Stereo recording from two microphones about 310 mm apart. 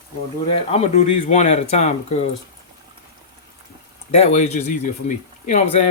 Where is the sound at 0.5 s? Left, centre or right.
Centre.